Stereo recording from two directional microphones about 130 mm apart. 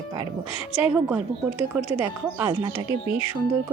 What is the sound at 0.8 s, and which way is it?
A woman's voice, 10° right (ahead or behind).